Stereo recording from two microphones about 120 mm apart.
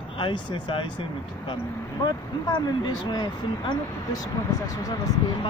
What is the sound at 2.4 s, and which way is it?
Speech, 35° left (ahead or behind).